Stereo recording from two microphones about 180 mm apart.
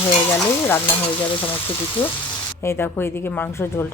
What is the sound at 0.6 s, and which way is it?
Speech, 10° left (ahead or behind).